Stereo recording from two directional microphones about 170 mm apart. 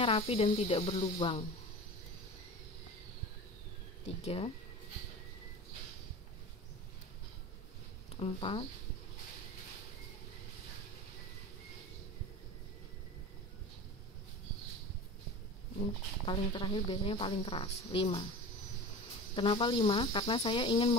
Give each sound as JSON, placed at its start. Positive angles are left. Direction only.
{"t": 0.0, "sound": "speech", "side_deg": 35}
{"t": 4.2, "sound": "speech", "side_deg": 35}
{"t": 8.2, "sound": "speech", "side_deg": 35}
{"t": 16.3, "sound": "speech", "side_deg": 30}
{"t": 19.3, "sound": "speech", "side_deg": 30}